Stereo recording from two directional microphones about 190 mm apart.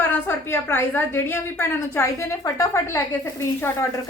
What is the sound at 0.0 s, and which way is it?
A woman's voice, 10° left (ahead or behind).